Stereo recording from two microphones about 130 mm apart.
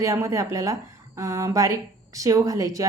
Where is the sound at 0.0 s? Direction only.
25° right (ahead or behind).